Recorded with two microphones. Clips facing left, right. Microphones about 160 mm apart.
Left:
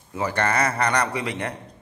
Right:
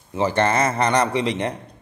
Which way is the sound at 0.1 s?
25° right (ahead or behind).